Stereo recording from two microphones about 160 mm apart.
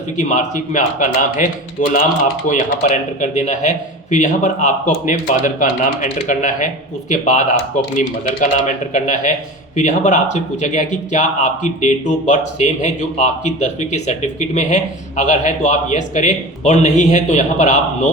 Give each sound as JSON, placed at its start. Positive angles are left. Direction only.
{"t": 0.2, "sound": "speech", "side_deg": 50}